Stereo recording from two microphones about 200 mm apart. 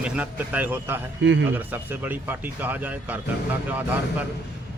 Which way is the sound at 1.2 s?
65° right (ahead or behind).